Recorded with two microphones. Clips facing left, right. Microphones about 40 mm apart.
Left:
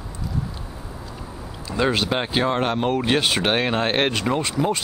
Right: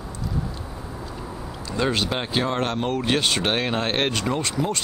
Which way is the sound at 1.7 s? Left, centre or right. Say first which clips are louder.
Left 2 dB; centre.